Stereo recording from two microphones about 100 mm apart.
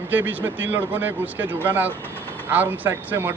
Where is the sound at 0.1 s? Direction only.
20° right (ahead or behind).